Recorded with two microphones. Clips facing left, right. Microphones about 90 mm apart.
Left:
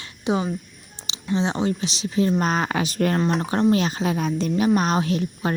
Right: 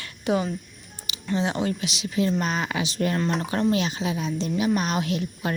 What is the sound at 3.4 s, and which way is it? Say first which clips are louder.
Speech: left 4 dB; 30° left (ahead or behind).